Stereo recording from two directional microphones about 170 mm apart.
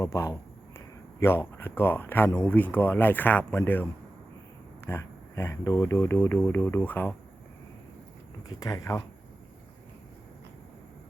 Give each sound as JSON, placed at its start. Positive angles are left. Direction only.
{"t": 0.0, "sound": "speech", "side_deg": 15}
{"t": 4.9, "sound": "speech", "side_deg": 15}
{"t": 8.4, "sound": "speech", "side_deg": 20}